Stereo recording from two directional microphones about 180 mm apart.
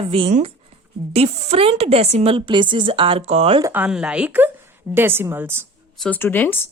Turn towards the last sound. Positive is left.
turn(degrees=10)  # may be behind; listen again after turning